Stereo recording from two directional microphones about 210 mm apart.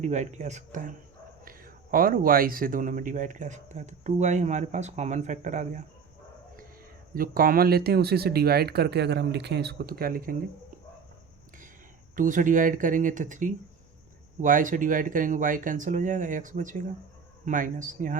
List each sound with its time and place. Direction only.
0.0 s speech: 35° right (ahead or behind)
7.1 s speech: 45° right (ahead or behind)
12.1 s speech: 40° right (ahead or behind)